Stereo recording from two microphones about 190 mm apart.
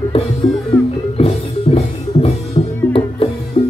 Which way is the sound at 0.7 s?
30° left (ahead or behind).